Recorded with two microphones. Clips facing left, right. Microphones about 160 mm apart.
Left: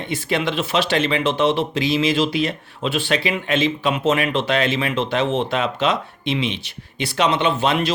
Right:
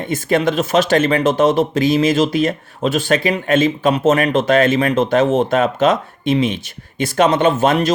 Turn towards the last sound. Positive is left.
turn(degrees=-45)  # may be behind; listen again after turning